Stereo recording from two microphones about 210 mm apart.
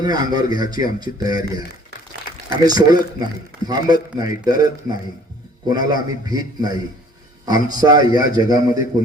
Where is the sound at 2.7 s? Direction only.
20° right (ahead or behind).